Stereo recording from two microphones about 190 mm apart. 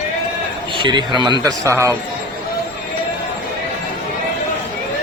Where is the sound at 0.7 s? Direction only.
25° right (ahead or behind).